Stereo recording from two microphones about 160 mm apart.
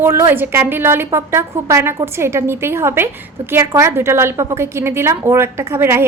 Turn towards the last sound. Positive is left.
turn(degrees=-15)  # may be behind; listen again after turning